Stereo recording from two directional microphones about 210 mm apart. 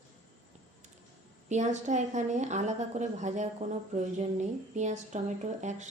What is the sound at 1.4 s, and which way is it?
A woman's voice, 35° right (ahead or behind).